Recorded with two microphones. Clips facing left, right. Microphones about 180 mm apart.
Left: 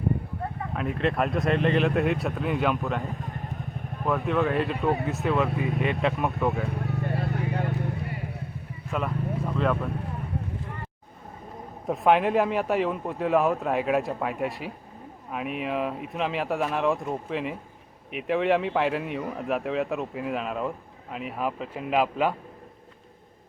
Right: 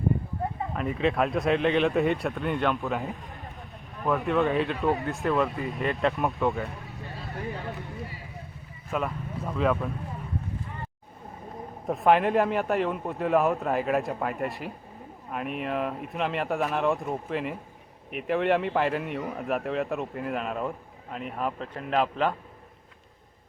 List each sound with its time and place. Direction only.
0.8 s a man's voice: centre (ahead or behind)
4.0 s a man's voice: centre (ahead or behind)
6.7 s vehicle: 60° left (ahead or behind)
8.9 s a man's voice: centre (ahead or behind)
11.9 s a man's voice: centre (ahead or behind)